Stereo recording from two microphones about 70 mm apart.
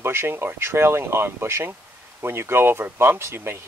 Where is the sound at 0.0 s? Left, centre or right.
Right.